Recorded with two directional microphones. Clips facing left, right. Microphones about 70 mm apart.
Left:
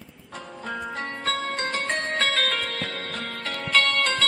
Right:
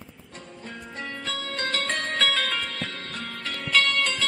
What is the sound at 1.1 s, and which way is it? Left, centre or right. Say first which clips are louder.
Music: left 4 dB; left.